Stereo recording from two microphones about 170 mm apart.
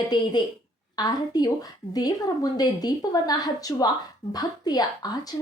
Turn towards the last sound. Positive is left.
turn(degrees=25)  # may be behind; listen again after turning